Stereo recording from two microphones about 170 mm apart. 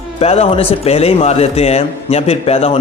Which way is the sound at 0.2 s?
35° left (ahead or behind).